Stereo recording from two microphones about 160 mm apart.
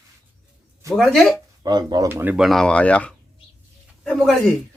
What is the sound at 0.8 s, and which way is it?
Speech, 20° right (ahead or behind).